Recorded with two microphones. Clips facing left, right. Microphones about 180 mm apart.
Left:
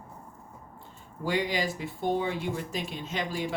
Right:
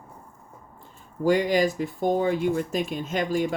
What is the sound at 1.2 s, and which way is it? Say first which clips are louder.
Speech: right 8 dB; 45° right (ahead or behind).